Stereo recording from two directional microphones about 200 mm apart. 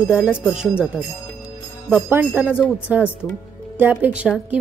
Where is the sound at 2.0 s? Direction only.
10° right (ahead or behind).